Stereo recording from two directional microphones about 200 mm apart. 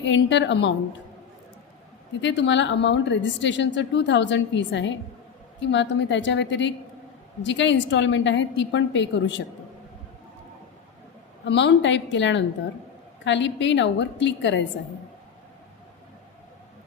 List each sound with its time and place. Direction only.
0.0 s a woman's voice: 65° left (ahead or behind)
2.2 s a woman's voice: 60° left (ahead or behind)
11.4 s a woman's voice: 60° left (ahead or behind)